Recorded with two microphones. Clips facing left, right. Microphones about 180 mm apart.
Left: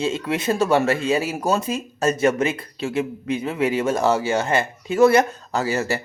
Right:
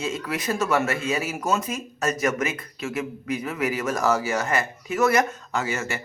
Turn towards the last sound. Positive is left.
turn(degrees=35)  # may be behind; listen again after turning